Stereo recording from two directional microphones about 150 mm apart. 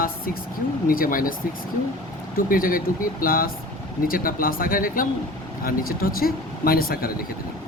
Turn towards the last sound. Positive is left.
turn(degrees=80)